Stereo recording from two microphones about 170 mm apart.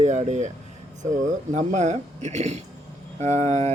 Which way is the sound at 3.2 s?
15° left (ahead or behind).